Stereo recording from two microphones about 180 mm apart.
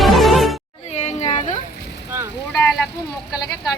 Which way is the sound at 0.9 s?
40° left (ahead or behind).